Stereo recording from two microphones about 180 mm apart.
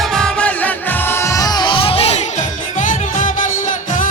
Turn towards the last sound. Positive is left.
turn(degrees=45)  # may be behind; listen again after turning